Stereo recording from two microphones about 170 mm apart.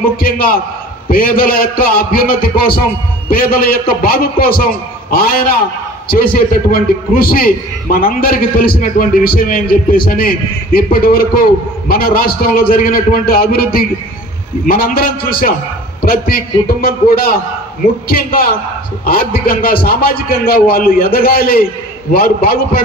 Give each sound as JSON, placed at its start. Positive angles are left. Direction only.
{"t": 0.2, "sound": "a man's voice", "side_deg": 60}
{"t": 6.0, "sound": "a man's voice", "side_deg": 60}